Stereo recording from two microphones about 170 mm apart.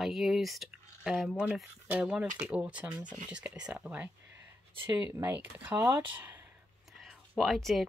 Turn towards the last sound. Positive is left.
turn(degrees=0)  # may be behind; listen again after turning